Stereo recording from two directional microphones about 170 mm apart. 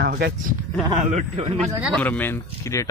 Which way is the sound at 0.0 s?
70° right (ahead or behind).